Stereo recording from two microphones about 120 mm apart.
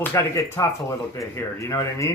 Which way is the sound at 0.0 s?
20° left (ahead or behind).